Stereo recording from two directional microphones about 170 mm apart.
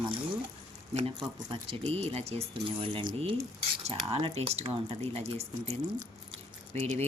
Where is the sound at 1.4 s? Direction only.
30° right (ahead or behind).